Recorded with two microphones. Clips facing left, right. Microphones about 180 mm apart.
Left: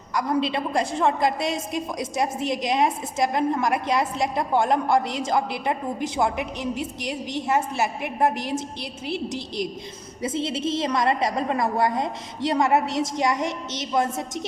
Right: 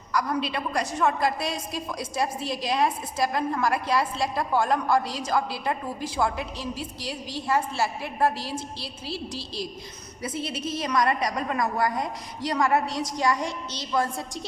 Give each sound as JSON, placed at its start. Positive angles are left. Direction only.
{"t": 0.1, "sound": "a woman's voice", "side_deg": 25}